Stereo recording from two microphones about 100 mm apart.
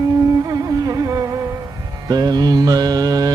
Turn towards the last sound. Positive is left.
turn(degrees=-40)  # may be behind; listen again after turning